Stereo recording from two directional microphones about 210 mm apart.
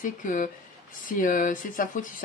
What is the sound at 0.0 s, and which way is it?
Speech, 40° left (ahead or behind).